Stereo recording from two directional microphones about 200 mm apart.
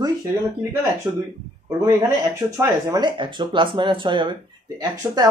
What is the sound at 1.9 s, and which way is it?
Speech, 15° right (ahead or behind).